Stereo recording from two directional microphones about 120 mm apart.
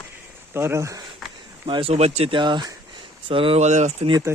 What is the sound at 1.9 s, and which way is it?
Speech, 60° right (ahead or behind).